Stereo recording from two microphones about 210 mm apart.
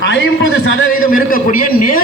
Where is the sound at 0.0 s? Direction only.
60° left (ahead or behind).